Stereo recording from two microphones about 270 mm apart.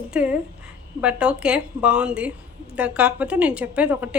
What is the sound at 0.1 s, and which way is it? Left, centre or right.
A woman's voice, centre.